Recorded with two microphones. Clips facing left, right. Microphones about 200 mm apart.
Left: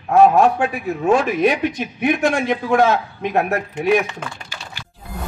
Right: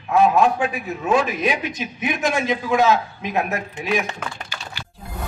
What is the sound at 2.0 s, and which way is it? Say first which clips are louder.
A man's voice: left 5 dB; 60° left (ahead or behind).